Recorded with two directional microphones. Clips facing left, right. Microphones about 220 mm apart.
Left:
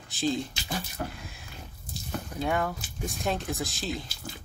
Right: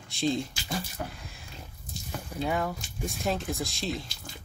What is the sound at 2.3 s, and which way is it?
Speech, centre (ahead or behind).